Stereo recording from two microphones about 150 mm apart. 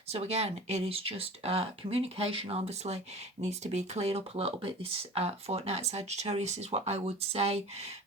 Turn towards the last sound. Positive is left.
turn(degrees=-45)  # may be behind; listen again after turning